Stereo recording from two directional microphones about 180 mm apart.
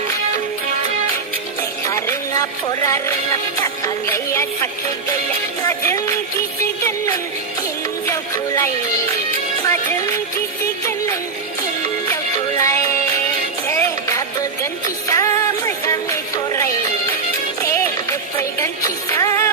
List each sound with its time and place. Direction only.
1.9 s music: 15° left (ahead or behind)
8.0 s music: 15° left (ahead or behind)
10.8 s music: 15° left (ahead or behind)